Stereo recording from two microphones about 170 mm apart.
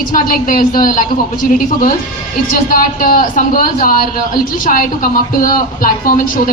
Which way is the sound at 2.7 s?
55° left (ahead or behind).